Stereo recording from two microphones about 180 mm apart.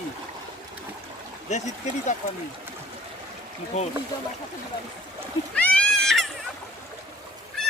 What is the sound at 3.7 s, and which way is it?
Speech, 40° left (ahead or behind).